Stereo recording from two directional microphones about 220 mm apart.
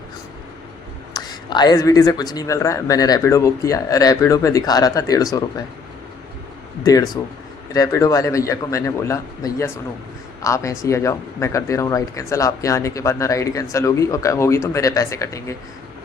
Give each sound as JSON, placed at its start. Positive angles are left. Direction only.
{"t": 1.1, "sound": "speech", "side_deg": 20}
{"t": 6.8, "sound": "speech", "side_deg": 15}